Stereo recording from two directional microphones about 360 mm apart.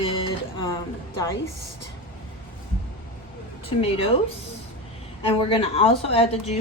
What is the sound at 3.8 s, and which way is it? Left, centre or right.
Speech, centre.